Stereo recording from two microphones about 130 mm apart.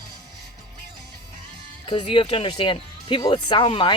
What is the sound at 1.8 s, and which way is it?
Speech, 45° left (ahead or behind).